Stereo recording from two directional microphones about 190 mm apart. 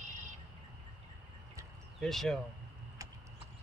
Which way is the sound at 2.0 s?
Centre (ahead or behind).